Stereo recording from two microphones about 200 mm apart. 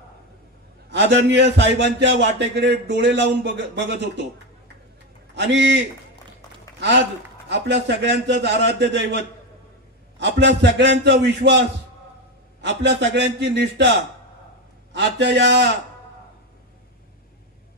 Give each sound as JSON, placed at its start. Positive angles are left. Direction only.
{"t": 0.8, "sound": "speech", "side_deg": -60}
{"t": 5.3, "sound": "a man's voice", "side_deg": -60}
{"t": 7.4, "sound": "speech", "side_deg": -60}
{"t": 12.6, "sound": "speech", "side_deg": -60}
{"t": 15.0, "sound": "speech", "side_deg": -60}